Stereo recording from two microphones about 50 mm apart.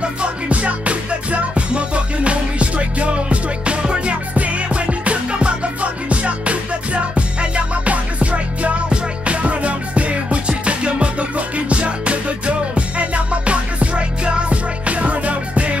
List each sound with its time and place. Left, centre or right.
0.0 s music: right